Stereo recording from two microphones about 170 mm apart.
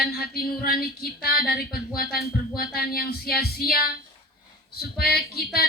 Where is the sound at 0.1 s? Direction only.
65° left (ahead or behind).